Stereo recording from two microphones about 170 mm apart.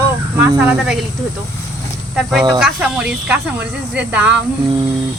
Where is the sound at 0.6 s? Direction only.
5° right (ahead or behind).